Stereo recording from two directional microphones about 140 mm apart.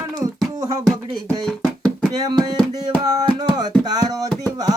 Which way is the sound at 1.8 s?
30° right (ahead or behind).